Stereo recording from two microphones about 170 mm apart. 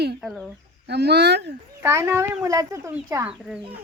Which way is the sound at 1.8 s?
15° right (ahead or behind).